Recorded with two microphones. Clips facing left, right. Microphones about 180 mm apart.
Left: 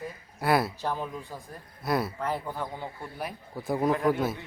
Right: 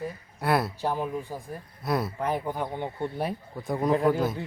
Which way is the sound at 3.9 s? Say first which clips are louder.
Right 4 dB; 35° right (ahead or behind).